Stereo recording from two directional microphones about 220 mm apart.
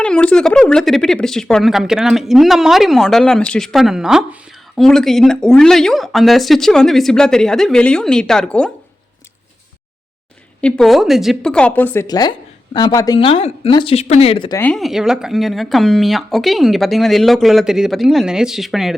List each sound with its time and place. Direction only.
0.0 s speech: 5° left (ahead or behind)
10.6 s speech: 5° left (ahead or behind); by 14.6 s 25° left (ahead or behind)
14.6 s speech: centre (ahead or behind)